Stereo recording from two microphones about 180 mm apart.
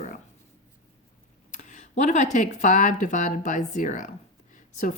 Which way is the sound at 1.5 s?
40° left (ahead or behind).